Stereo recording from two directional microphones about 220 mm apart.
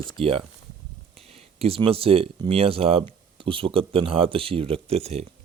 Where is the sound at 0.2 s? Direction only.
25° right (ahead or behind).